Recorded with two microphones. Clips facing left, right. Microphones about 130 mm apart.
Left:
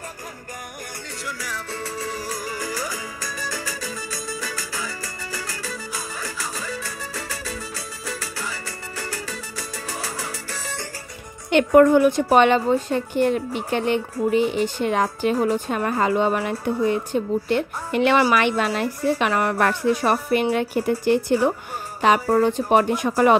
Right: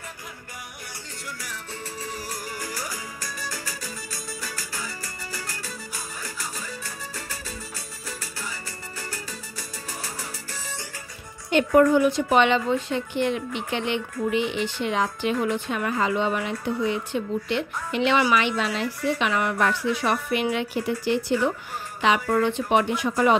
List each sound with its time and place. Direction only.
1.2 s music: 90° left
4.1 s music: 90° left
11.5 s a woman's voice: 55° left (ahead or behind)